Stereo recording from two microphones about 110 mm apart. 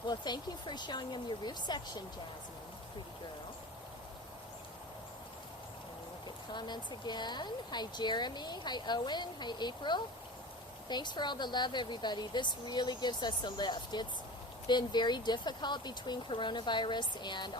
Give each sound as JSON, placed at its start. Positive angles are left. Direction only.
{"t": 0.1, "sound": "speech", "side_deg": 40}
{"t": 6.2, "sound": "speech", "side_deg": 40}